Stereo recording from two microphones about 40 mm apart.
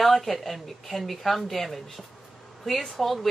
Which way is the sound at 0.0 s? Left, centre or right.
Centre.